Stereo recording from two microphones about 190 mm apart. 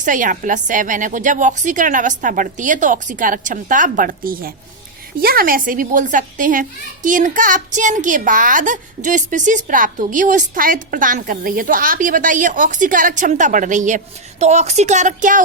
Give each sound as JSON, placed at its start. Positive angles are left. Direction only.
{"t": 0.0, "sound": "a child's voice", "side_deg": -45}